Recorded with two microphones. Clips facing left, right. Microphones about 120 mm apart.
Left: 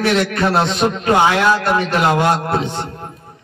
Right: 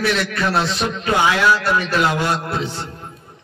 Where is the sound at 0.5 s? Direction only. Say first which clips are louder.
Left 4 dB; 50° left (ahead or behind).